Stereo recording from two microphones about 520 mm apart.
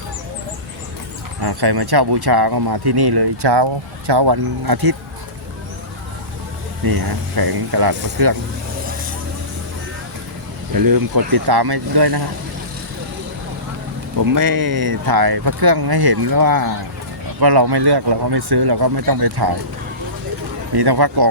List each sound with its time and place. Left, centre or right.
1.4 s speech: right
6.8 s speech: right
10.7 s speech: right
14.2 s speech: right
20.7 s speech: right